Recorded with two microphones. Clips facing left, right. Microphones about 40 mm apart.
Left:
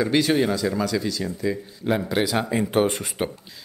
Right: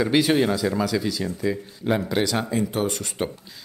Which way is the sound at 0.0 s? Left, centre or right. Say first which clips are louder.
Right 1 dB; centre.